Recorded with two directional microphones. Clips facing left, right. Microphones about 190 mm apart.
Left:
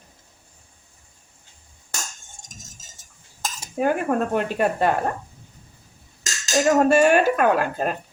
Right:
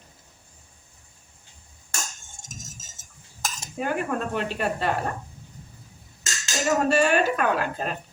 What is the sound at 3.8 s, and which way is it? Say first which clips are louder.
Speech: left 6 dB; 45° left (ahead or behind).